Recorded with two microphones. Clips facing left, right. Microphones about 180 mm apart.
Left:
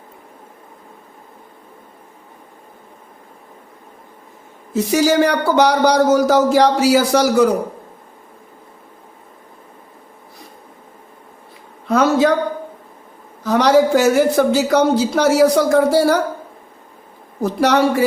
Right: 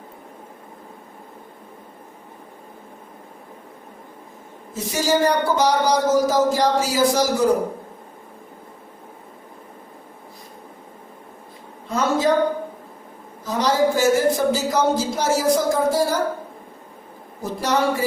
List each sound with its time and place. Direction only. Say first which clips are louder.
4.7 s speech: left 6 dB; 70° left (ahead or behind)
11.9 s a sound: left 6 dB; 70° left (ahead or behind)
13.4 s speech: left 6 dB; 70° left (ahead or behind)
17.4 s speech: left 6 dB; 70° left (ahead or behind)